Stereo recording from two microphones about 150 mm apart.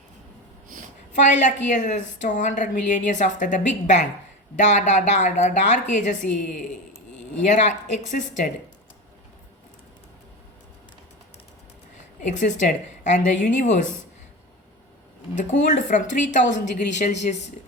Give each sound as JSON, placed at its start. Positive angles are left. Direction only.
{"t": 1.1, "sound": "a woman's voice", "side_deg": 55}
{"t": 12.2, "sound": "a woman's voice", "side_deg": 55}
{"t": 15.4, "sound": "a woman's voice", "side_deg": 55}